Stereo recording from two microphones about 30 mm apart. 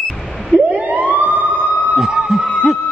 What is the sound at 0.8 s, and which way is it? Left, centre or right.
Emergency vehicle, right.